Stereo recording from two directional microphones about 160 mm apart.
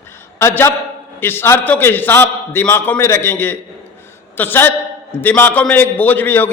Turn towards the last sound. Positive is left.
turn(degrees=10)  # may be behind; listen again after turning